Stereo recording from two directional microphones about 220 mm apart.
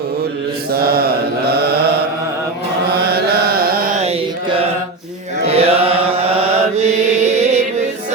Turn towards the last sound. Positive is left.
turn(degrees=-30)  # may be behind; listen again after turning